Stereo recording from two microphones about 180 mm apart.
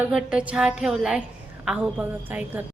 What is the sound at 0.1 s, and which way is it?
Music, 5° right (ahead or behind).